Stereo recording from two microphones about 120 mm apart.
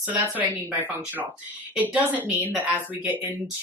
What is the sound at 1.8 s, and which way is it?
Speech, 15° right (ahead or behind).